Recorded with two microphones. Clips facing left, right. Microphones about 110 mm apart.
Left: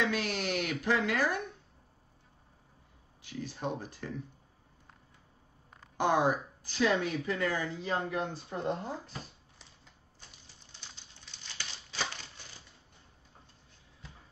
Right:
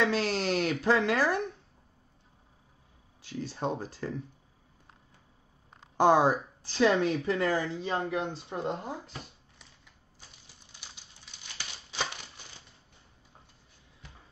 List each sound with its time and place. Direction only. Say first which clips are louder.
0.0 s speech: right 4 dB; 30° right (ahead or behind)
3.5 s speech: right 4 dB; 35° right (ahead or behind)
5.9 s speech: right 5 dB; 35° right (ahead or behind); by 9.3 s 15° right (ahead or behind)
11.5 s crumpling: right 3 dB; 15° right (ahead or behind)